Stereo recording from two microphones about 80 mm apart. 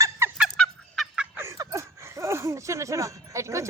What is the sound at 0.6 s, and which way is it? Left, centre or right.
Fowl, centre.